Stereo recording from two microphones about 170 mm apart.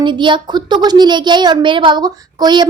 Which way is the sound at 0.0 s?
30° right (ahead or behind).